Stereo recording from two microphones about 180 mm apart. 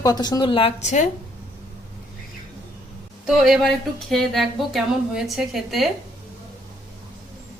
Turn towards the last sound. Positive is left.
turn(degrees=0)  # may be behind; listen again after turning